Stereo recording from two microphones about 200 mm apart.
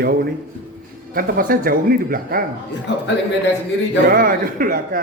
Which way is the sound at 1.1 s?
45° right (ahead or behind).